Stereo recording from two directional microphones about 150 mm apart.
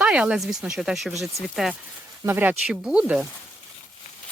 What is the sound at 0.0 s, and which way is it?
Speech, 5° right (ahead or behind).